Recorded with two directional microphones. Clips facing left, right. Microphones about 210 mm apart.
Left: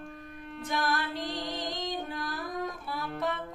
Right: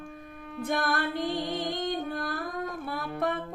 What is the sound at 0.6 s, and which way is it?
Music, 55° right (ahead or behind).